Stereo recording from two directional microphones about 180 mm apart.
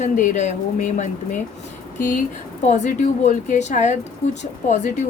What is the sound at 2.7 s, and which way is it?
A woman's voice, 40° left (ahead or behind).